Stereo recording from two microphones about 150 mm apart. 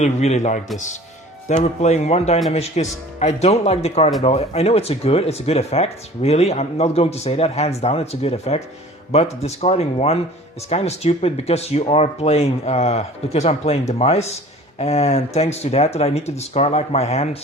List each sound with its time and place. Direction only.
0.0 s speech: 50° left (ahead or behind)